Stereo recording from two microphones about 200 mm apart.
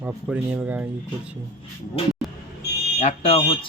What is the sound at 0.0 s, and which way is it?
Speech, 10° right (ahead or behind).